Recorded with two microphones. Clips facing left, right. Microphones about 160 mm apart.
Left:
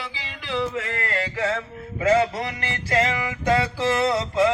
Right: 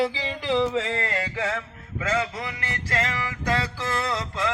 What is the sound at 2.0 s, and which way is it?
Music, 30° left (ahead or behind).